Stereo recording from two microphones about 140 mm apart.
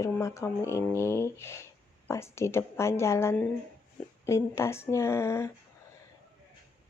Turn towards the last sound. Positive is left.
turn(degrees=20)  # may be behind; listen again after turning